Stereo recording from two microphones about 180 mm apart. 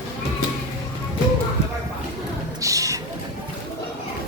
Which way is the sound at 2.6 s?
20° right (ahead or behind).